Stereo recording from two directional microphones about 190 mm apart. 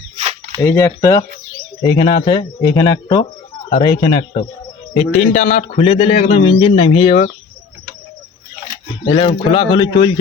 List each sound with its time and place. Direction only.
0.6 s speech: 15° left (ahead or behind)
4.9 s a man's voice: 40° left (ahead or behind)
9.0 s speech: 25° left (ahead or behind)